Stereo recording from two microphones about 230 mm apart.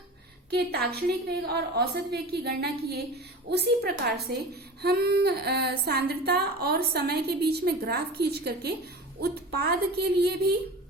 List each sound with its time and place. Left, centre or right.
0.5 s speech: right